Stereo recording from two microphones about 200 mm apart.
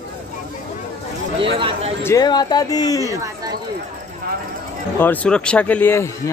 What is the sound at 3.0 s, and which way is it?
Speech, 15° right (ahead or behind).